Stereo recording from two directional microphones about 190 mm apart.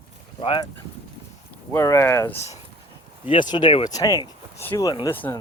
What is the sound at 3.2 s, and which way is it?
Speech, 25° left (ahead or behind).